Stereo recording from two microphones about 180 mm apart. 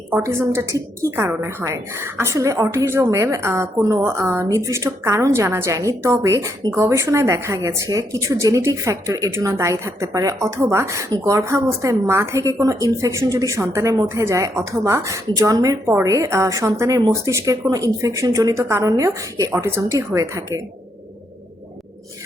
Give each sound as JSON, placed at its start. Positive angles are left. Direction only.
{"t": 0.1, "sound": "a woman's voice", "side_deg": -15}